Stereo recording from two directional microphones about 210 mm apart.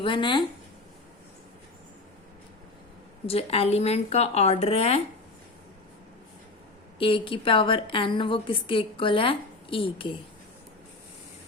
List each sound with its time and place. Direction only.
0.0 s a woman's voice: 25° left (ahead or behind)
3.2 s a woman's voice: 30° left (ahead or behind)
7.0 s a woman's voice: 25° left (ahead or behind)